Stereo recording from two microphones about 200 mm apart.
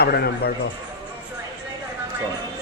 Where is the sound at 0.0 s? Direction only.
55° left (ahead or behind).